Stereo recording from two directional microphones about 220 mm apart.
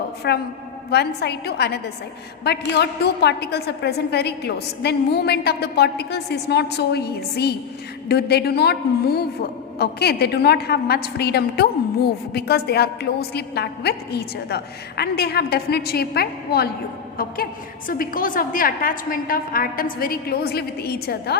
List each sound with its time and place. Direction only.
0.2 s a woman's voice: 50° left (ahead or behind)
17.8 s a woman's voice: 40° left (ahead or behind)